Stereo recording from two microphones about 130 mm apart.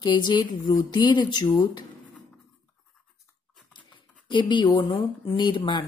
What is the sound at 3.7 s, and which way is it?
Speech, 40° left (ahead or behind).